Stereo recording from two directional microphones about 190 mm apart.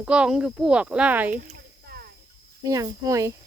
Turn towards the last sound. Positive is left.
turn(degrees=-15)  # may be behind; listen again after turning